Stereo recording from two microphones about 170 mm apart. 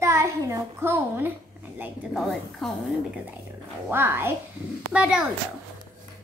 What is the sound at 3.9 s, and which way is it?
A child's voice, 15° right (ahead or behind).